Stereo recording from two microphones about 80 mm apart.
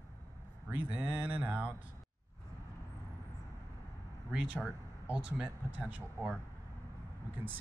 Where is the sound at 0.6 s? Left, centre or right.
Right.